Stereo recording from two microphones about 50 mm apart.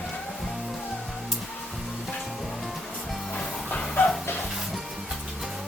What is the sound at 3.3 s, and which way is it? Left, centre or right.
Music, left.